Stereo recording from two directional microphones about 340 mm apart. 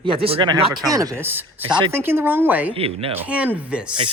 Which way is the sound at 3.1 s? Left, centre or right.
Centre.